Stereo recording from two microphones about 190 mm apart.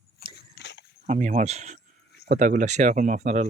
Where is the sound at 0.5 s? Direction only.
65° left (ahead or behind).